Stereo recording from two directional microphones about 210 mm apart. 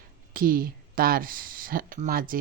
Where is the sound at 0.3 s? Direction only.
45° right (ahead or behind).